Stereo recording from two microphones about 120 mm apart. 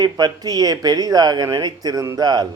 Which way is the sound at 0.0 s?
35° right (ahead or behind).